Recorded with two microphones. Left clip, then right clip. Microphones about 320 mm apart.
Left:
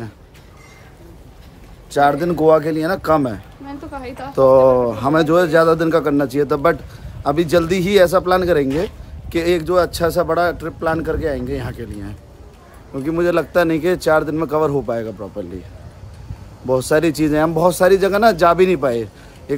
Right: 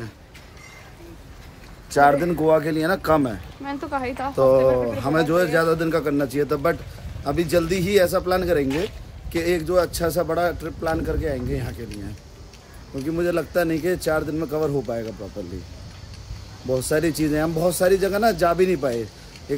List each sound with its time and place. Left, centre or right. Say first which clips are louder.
2.0 s speech: left 2 dB; centre
3.6 s a woman's voice: right 4 dB; centre
4.4 s speech: left 6 dB; centre
13.0 s speech: left 6 dB; centre
16.7 s speech: left 6 dB; centre